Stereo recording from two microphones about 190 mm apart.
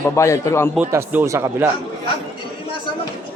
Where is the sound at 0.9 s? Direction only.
10° right (ahead or behind).